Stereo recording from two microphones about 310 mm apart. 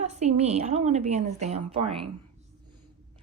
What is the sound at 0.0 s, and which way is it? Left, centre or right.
A woman's voice, right.